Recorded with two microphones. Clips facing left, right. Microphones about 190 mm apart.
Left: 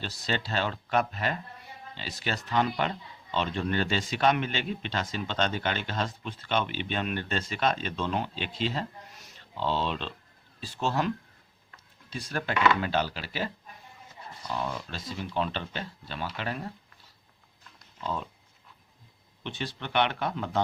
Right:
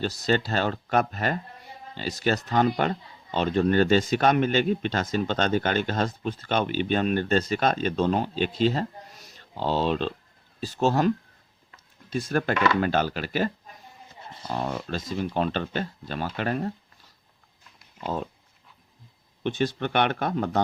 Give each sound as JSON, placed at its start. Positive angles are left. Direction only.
{"t": 0.0, "sound": "speech", "side_deg": -45}
{"t": 12.1, "sound": "speech", "side_deg": -45}
{"t": 14.5, "sound": "speech", "side_deg": -45}
{"t": 19.4, "sound": "speech", "side_deg": -45}